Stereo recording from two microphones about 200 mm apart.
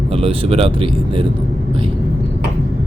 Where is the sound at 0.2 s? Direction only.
30° right (ahead or behind).